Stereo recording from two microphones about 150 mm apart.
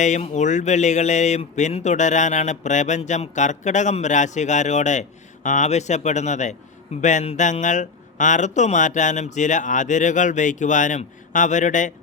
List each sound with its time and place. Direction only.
0.0 s speech: 50° left (ahead or behind)